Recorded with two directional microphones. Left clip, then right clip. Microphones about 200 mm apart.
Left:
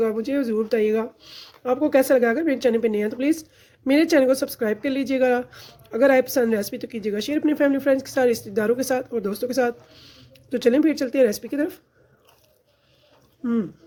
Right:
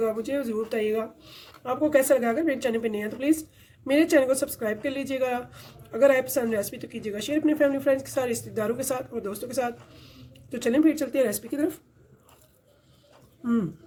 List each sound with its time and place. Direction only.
0.0 s speech: 45° left (ahead or behind)
0.5 s speech: 55° left (ahead or behind); by 11.7 s 35° left (ahead or behind)